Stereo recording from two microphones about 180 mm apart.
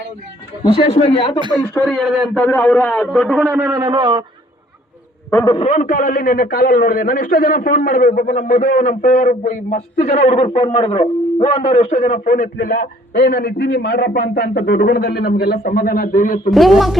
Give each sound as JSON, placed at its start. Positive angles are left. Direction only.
{"t": 0.6, "sound": "speech", "side_deg": 25}
{"t": 1.5, "sound": "a man's voice", "side_deg": 10}
{"t": 3.4, "sound": "a man's voice", "side_deg": -10}
{"t": 5.5, "sound": "a man's voice", "side_deg": 30}
{"t": 5.7, "sound": "a man's voice", "side_deg": 45}
{"t": 16.5, "sound": "a man's voice", "side_deg": 0}